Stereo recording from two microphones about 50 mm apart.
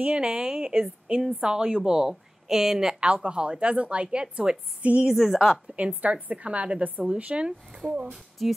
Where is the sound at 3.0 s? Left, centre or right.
Right.